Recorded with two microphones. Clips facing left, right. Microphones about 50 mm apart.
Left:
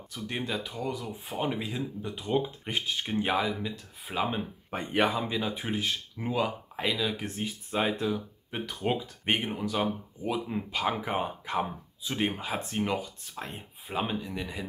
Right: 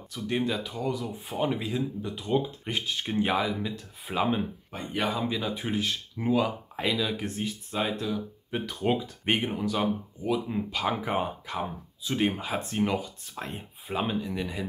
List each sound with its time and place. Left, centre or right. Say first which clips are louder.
0.1 s speech: right 5 dB; centre
4.6 s speech: left 6 dB; left
5.1 s speech: right 1 dB; centre
7.7 s speech: left 2 dB; centre
8.5 s speech: right 3 dB; centre
11.4 s speech: left 2 dB; centre
12.1 s speech: right 3 dB; centre